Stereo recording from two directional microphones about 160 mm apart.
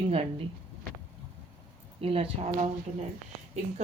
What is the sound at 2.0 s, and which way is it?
Speech, 35° right (ahead or behind).